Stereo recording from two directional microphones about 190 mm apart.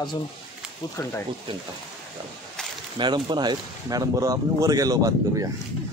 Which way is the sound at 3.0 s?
25° right (ahead or behind).